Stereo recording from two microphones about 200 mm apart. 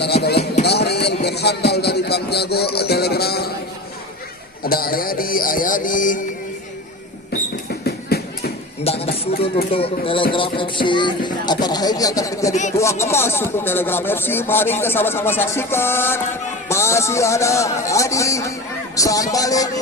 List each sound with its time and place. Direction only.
0.0 s speech: 55° left (ahead or behind)
4.6 s speech: 50° left (ahead or behind)
7.7 s a sound: 50° left (ahead or behind)
8.8 s a woman's voice: 30° left (ahead or behind)